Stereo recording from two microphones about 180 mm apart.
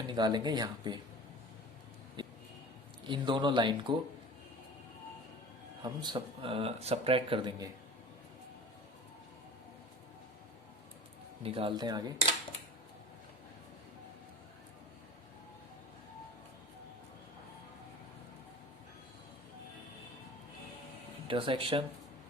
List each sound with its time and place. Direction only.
0.1 s speech: 25° right (ahead or behind)
2.2 s a sound: 25° right (ahead or behind)
3.0 s speech: 25° right (ahead or behind)
5.8 s speech: 25° right (ahead or behind)
11.4 s speech: 30° right (ahead or behind)
21.2 s speech: 30° right (ahead or behind)